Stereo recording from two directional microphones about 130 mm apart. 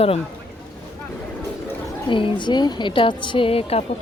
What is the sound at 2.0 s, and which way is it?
A woman's voice, 40° left (ahead or behind).